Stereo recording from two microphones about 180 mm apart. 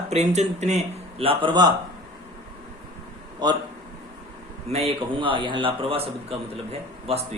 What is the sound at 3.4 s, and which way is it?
Speech, 25° right (ahead or behind).